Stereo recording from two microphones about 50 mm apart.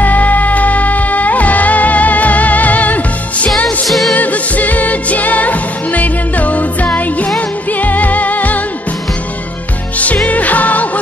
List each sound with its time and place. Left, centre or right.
0.0 s music: left
3.6 s music: centre
4.1 s music: left
9.9 s music: left